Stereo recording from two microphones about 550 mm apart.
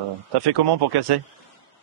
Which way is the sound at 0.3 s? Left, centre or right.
Right.